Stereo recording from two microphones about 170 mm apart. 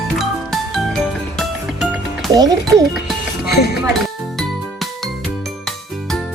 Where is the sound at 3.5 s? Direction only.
70° left (ahead or behind).